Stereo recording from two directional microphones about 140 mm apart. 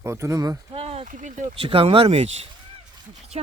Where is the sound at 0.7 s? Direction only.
45° right (ahead or behind).